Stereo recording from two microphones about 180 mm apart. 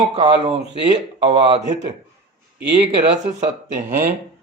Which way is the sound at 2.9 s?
40° right (ahead or behind).